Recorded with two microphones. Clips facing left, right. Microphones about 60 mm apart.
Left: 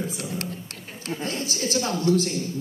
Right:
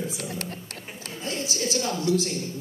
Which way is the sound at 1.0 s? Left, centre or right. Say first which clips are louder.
Left 3 dB; left.